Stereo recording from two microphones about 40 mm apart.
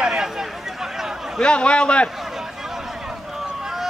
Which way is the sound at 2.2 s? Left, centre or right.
Centre.